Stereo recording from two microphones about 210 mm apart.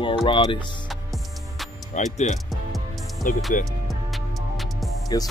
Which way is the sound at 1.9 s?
35° left (ahead or behind).